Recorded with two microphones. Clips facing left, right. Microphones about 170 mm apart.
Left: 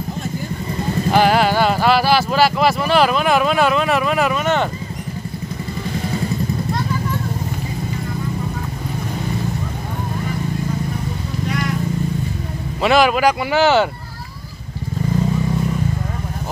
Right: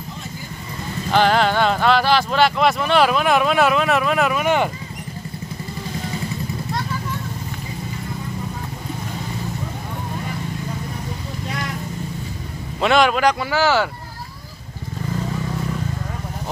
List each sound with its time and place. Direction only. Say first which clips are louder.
1.1 s speech: left 1 dB; 10° left (ahead or behind); by 4.6 s 10° right (ahead or behind)
12.8 s a man's voice: left 2 dB; 5° left (ahead or behind)
13.5 s speech: left 4 dB; 20° left (ahead or behind)